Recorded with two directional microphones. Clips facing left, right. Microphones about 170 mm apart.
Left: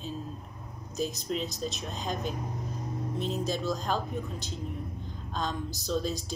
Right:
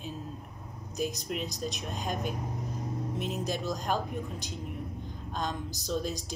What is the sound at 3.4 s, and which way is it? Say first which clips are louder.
Speech: left 2 dB; 15° right (ahead or behind).